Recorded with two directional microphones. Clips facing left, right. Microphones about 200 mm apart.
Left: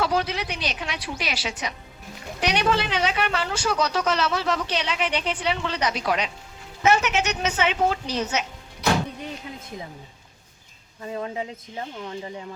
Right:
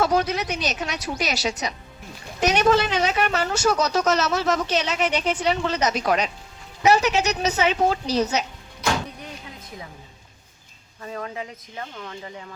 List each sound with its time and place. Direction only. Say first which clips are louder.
0.0 s a woman's voice: right 3 dB; 45° right (ahead or behind)
11.0 s speech: left 2 dB; 20° left (ahead or behind)